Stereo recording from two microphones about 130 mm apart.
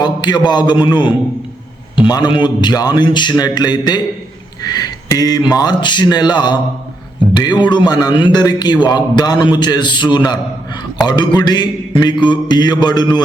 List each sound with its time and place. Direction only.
0.0 s a man's voice: 35° left (ahead or behind)